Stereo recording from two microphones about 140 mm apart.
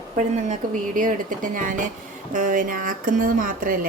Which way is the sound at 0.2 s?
60° right (ahead or behind).